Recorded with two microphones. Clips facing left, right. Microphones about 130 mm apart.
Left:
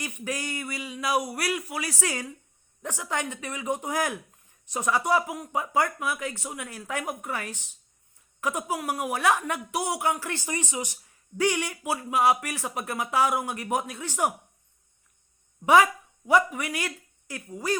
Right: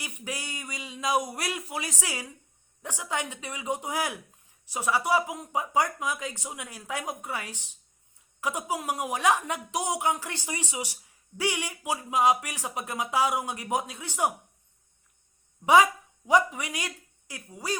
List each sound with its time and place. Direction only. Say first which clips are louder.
0.0 s a woman's voice: left 5 dB; 15° right (ahead or behind)
15.6 s speech: left 1 dB; 15° right (ahead or behind)